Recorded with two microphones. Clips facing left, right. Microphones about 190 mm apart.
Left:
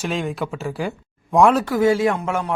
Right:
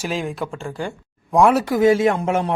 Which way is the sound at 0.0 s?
Centre (ahead or behind).